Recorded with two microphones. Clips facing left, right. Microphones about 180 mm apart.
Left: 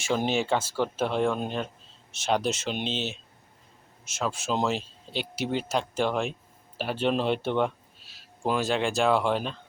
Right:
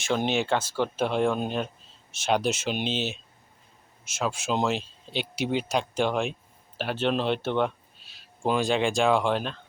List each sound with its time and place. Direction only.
0.0 s speech: 5° left (ahead or behind)
2.7 s speech: 25° left (ahead or behind)
4.2 s speech: centre (ahead or behind)